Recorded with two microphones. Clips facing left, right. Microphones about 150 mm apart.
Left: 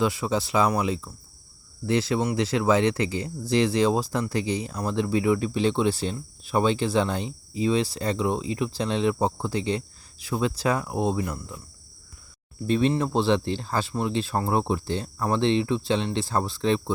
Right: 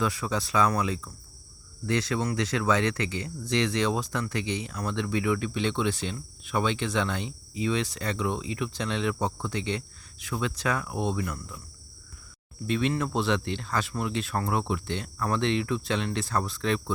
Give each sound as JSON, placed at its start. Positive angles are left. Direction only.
{"t": 0.0, "sound": "speech", "side_deg": 30}
{"t": 12.6, "sound": "speech", "side_deg": 35}